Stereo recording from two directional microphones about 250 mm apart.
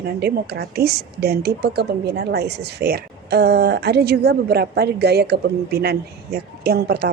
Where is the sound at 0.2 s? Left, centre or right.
Right.